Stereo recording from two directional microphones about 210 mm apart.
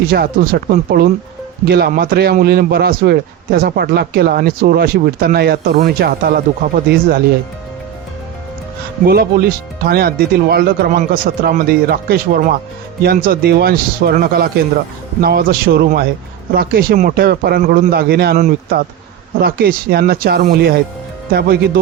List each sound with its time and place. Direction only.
0.1 s a man's voice: 45° right (ahead or behind)
9.0 s a man's voice: 45° right (ahead or behind)